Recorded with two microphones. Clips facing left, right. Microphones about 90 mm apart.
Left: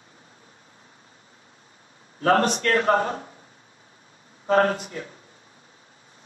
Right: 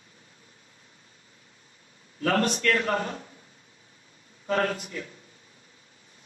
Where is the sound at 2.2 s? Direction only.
35° left (ahead or behind).